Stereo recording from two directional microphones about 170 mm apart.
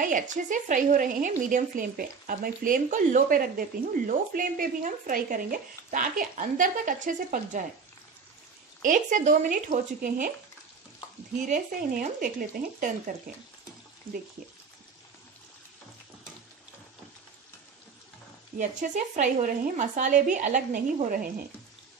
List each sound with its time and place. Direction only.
0.0 s a woman's voice: 50° right (ahead or behind)
8.8 s a woman's voice: 50° right (ahead or behind)
11.4 s a woman's voice: 50° right (ahead or behind)
18.6 s a woman's voice: 45° right (ahead or behind)